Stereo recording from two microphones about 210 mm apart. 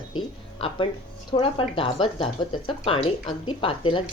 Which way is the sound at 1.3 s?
25° left (ahead or behind).